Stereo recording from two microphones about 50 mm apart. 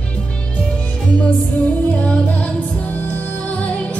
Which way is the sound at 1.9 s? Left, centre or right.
Left.